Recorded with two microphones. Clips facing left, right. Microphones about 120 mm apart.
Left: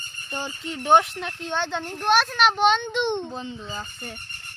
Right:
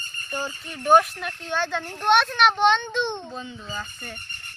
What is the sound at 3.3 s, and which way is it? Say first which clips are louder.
Speech: left 2 dB; 30° left (ahead or behind).